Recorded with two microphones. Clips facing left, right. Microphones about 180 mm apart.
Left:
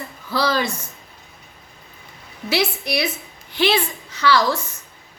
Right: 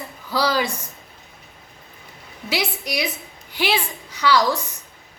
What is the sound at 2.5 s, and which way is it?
A woman's voice, 15° right (ahead or behind).